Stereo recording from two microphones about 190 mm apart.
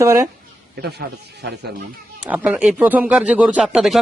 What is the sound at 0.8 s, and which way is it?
Speech, 60° right (ahead or behind).